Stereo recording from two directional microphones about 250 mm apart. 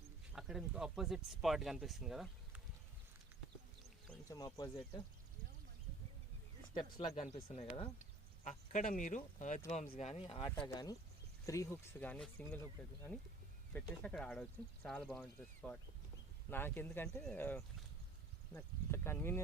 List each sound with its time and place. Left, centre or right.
0.3 s speech: centre
4.1 s speech: centre
6.7 s speech: centre
13.7 s speech: centre